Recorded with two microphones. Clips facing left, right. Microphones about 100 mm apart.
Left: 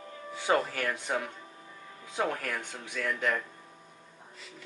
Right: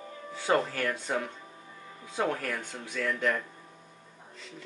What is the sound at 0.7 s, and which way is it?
Speech, 15° left (ahead or behind).